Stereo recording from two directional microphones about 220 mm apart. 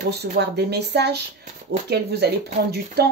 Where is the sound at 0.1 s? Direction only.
45° right (ahead or behind).